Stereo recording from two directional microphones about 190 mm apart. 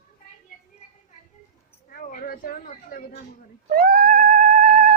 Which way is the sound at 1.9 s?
45° left (ahead or behind).